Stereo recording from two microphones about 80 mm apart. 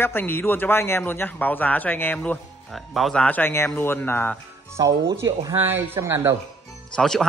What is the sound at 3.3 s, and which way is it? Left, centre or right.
A man's voice, left.